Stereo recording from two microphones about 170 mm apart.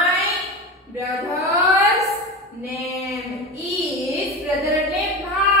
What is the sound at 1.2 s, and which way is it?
Mantra, 20° right (ahead or behind).